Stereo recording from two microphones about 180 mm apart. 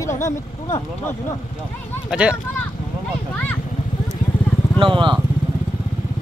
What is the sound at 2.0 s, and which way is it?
Speech, 5° right (ahead or behind).